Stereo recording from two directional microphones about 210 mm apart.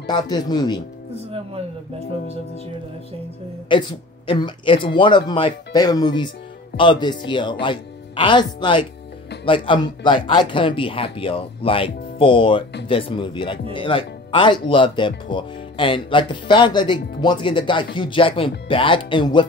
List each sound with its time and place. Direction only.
0.0 s speech: 20° left (ahead or behind)
1.3 s speech: 30° right (ahead or behind)
3.7 s speech: 25° left (ahead or behind)